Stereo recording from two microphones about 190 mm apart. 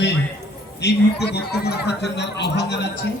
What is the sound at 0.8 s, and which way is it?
Speech, 60° left (ahead or behind).